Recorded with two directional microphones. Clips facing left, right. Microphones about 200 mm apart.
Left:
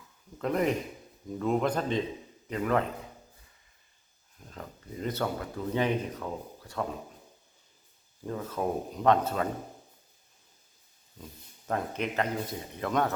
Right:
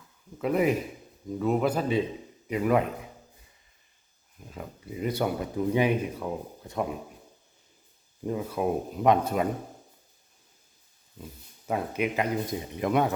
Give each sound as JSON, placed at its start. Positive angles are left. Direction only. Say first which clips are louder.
{"t": 0.3, "sound": "speech", "louder": "right 3 dB", "side_deg": -5}
{"t": 4.4, "sound": "speech", "louder": "right 3 dB", "side_deg": -10}
{"t": 8.2, "sound": "speech", "louder": "right 4 dB", "side_deg": -15}
{"t": 11.7, "sound": "speech", "louder": "right 3 dB", "side_deg": -10}